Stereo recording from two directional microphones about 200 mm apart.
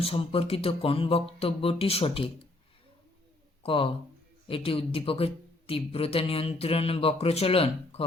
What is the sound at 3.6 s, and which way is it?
Speech, 25° left (ahead or behind).